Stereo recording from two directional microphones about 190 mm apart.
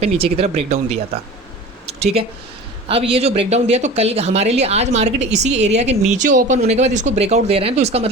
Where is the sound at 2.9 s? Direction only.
30° right (ahead or behind).